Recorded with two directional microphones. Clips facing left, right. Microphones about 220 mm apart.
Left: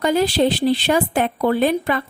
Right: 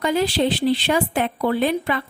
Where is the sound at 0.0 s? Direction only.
40° left (ahead or behind).